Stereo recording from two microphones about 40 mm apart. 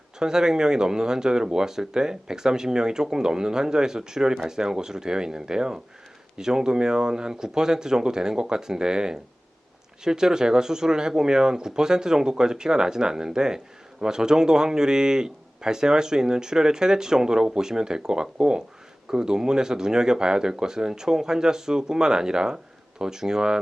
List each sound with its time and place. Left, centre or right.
0.2 s speech: centre